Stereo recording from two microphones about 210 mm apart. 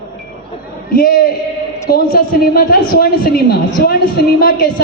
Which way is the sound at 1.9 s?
45° left (ahead or behind).